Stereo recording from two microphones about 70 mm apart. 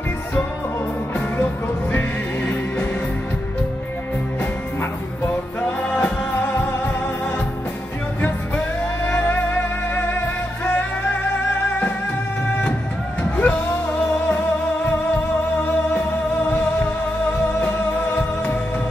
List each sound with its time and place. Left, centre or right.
1.4 s music: left
5.6 s music: left
8.2 s music: left
13.2 s music: left
18.1 s music: left